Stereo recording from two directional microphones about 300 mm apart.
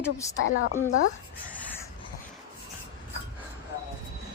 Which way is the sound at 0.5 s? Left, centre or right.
Left.